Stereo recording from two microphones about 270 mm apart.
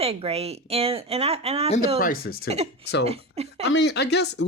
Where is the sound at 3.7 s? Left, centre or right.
Left.